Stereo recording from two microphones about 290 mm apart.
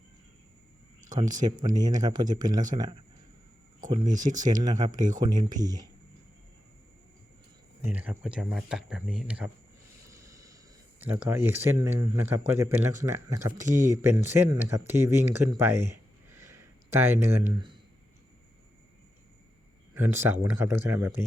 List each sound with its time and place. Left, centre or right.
1.1 s speech: centre
7.8 s speech: centre
10.1 s a sound: centre
11.0 s speech: centre
19.9 s speech: centre